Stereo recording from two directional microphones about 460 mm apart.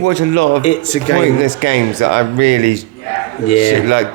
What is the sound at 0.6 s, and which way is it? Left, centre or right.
Speech, left.